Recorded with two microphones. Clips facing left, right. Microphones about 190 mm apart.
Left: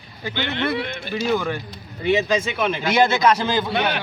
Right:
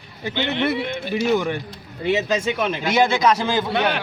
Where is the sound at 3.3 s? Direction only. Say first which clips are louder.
Even; 10° right (ahead or behind).